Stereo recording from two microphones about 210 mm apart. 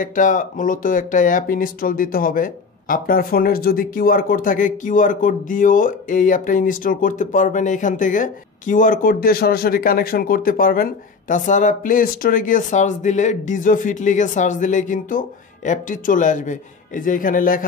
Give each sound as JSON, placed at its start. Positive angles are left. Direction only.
{"t": 0.0, "sound": "speech", "side_deg": 40}